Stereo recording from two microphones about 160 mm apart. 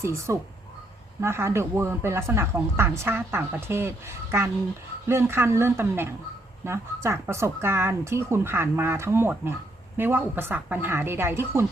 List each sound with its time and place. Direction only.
0.0 s speech: 15° right (ahead or behind)